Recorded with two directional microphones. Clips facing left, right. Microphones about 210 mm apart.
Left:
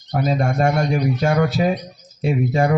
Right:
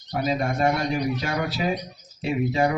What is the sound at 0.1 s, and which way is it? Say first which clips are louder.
Speech: left 4 dB; 45° left (ahead or behind).